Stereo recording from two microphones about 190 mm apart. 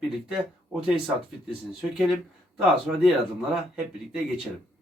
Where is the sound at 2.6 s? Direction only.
Centre (ahead or behind).